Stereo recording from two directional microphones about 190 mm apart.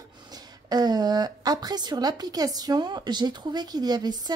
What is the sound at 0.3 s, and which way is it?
A woman's voice, 20° right (ahead or behind).